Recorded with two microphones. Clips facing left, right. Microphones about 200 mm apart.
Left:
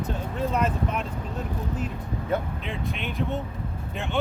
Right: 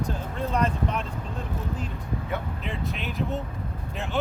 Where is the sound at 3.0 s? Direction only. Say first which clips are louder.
Left 2 dB; centre (ahead or behind).